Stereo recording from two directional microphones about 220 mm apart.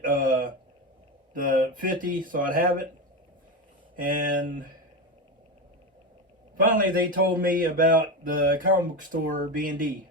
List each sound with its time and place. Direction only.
0.0 s a sound: 40° right (ahead or behind)
1.3 s speech: 40° right (ahead or behind)
3.9 s speech: 40° right (ahead or behind)
6.6 s speech: 40° right (ahead or behind)